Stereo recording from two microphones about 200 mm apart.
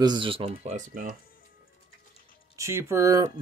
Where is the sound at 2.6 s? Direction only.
15° right (ahead or behind).